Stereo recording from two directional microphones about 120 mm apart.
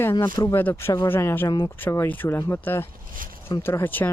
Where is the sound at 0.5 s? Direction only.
20° left (ahead or behind).